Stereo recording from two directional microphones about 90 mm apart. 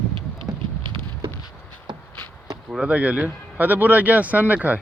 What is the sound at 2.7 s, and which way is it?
Speech, 15° right (ahead or behind).